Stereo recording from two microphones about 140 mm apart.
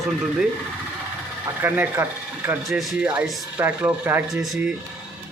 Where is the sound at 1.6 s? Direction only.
15° right (ahead or behind).